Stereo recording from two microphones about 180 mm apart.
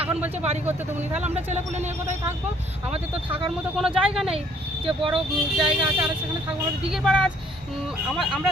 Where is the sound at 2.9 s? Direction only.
30° right (ahead or behind).